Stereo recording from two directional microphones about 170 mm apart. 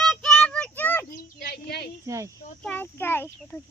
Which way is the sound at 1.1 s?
65° left (ahead or behind).